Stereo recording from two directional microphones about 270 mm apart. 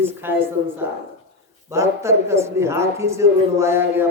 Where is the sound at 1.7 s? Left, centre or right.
Centre.